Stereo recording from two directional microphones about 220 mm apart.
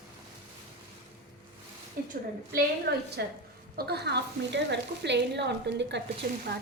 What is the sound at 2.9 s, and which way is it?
A woman's voice, 45° right (ahead or behind).